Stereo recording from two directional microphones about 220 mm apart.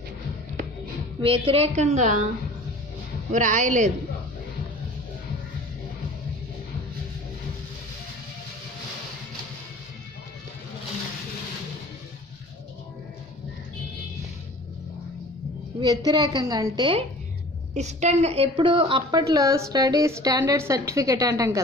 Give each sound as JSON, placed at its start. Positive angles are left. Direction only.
{"t": 1.2, "sound": "a woman's voice", "side_deg": -25}
{"t": 3.3, "sound": "a woman's voice", "side_deg": -35}
{"t": 15.8, "sound": "a woman's voice", "side_deg": -20}
{"t": 17.7, "sound": "a woman's voice", "side_deg": -30}